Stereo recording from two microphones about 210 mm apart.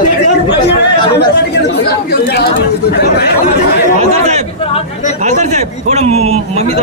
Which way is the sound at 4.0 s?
30° right (ahead or behind).